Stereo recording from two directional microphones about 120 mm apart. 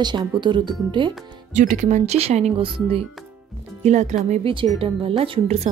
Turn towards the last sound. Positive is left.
turn(degrees=-55)  # may be behind; listen again after turning